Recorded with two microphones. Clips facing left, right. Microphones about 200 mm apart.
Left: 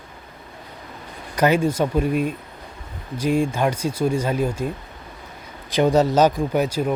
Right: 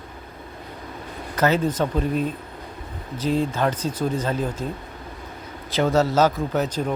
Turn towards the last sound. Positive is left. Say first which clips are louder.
# left 3 dB
turn(degrees=10)  # may be behind; listen again after turning